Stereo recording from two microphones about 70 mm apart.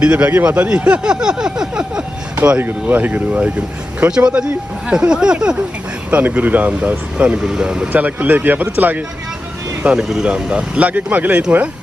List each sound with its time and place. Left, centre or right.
0.0 s speech: right
2.3 s speech: right
7.4 s speech: centre; by 9.0 s right
9.8 s speech: centre